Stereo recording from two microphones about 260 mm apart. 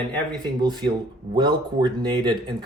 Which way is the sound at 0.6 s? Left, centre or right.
Centre.